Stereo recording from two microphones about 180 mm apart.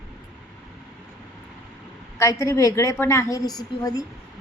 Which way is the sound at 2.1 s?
15° left (ahead or behind).